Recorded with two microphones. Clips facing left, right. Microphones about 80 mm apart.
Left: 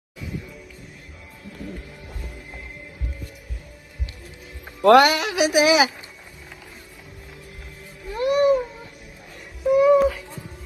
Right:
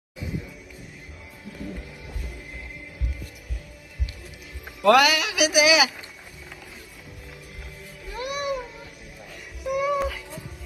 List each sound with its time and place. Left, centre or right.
4.8 s a man's voice: left
8.1 s cat: left
9.7 s a sound: centre